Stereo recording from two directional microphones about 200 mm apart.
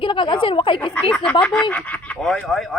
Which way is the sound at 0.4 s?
25° left (ahead or behind).